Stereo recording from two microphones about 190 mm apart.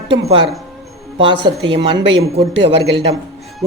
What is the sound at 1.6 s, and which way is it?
Speech, 70° right (ahead or behind).